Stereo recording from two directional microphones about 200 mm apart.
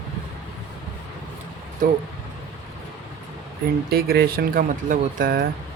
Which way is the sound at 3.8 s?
50° right (ahead or behind).